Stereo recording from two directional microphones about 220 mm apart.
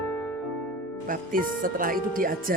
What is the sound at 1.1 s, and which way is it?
Speech, 40° right (ahead or behind).